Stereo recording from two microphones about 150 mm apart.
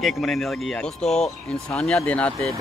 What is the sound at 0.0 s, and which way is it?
Speech, centre (ahead or behind).